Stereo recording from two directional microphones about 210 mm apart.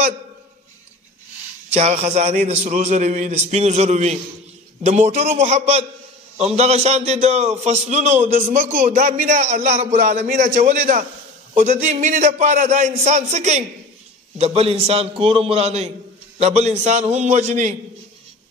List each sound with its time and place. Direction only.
1.7 s a man's voice: 30° right (ahead or behind)